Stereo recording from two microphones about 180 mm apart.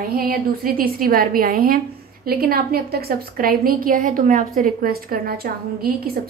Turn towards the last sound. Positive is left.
turn(degrees=-55)  # may be behind; listen again after turning